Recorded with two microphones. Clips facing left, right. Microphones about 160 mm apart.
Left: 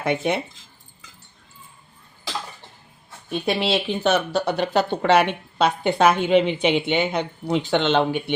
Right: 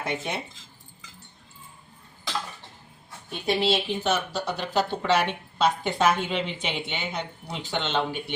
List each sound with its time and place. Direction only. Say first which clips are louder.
0.0 s speech: left 8 dB; 60° left (ahead or behind)
3.4 s speech: left 1 dB; 65° left (ahead or behind)